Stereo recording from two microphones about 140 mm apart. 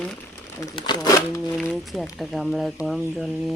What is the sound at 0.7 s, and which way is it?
Speech, 30° left (ahead or behind).